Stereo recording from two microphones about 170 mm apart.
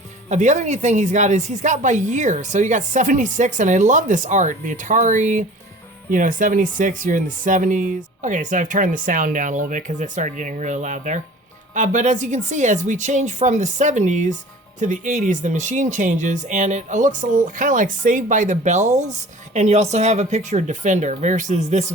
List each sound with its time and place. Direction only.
0.3 s speech: 45° right (ahead or behind)